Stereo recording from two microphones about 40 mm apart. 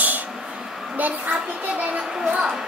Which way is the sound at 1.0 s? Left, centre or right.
Right.